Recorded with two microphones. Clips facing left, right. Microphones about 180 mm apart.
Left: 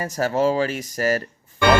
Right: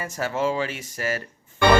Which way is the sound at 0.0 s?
40° left (ahead or behind).